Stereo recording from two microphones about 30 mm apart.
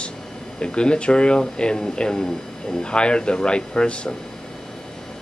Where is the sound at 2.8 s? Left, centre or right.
Left.